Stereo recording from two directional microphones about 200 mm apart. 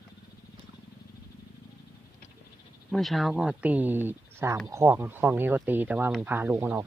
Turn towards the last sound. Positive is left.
turn(degrees=-10)  # may be behind; listen again after turning